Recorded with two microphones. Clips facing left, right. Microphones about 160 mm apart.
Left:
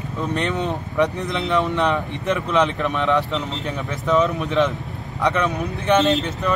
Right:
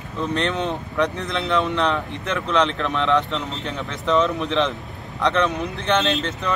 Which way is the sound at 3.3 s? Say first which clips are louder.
Left 2 dB; centre (ahead or behind).